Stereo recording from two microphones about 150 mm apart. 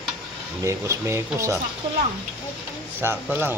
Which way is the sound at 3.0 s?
15° right (ahead or behind).